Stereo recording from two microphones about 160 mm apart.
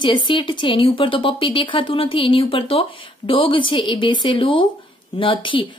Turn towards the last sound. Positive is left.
turn(degrees=30)  # may be behind; listen again after turning